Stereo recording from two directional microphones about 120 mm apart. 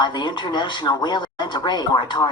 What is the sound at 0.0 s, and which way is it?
Speech, 40° left (ahead or behind).